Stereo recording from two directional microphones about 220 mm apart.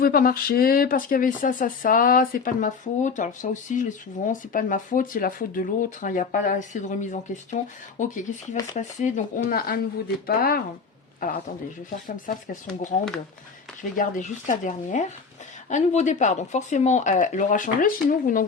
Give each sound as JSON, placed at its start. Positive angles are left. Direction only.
{"t": 0.0, "sound": "speech", "side_deg": 40}